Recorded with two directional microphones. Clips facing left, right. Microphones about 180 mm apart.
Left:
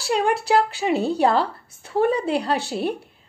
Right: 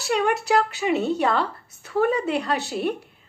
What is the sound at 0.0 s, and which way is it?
A woman's voice, 30° left (ahead or behind).